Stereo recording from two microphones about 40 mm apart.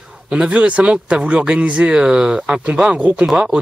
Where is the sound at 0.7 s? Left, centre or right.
Right.